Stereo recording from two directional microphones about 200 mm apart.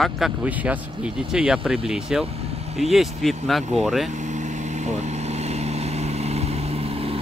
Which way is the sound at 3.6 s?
35° right (ahead or behind).